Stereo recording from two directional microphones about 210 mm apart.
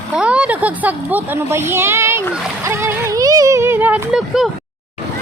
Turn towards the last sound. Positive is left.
turn(degrees=0)  # may be behind; listen again after turning